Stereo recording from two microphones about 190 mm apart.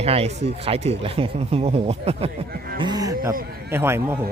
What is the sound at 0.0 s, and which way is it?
Speech, 30° right (ahead or behind).